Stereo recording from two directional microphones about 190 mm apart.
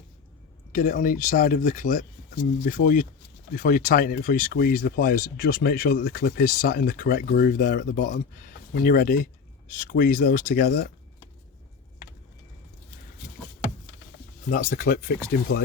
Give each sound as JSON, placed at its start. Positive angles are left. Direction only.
{"t": 0.7, "sound": "speech", "side_deg": 45}
{"t": 14.5, "sound": "speech", "side_deg": 50}